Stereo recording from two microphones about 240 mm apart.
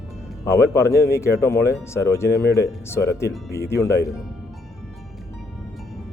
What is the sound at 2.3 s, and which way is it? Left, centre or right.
Speech, left.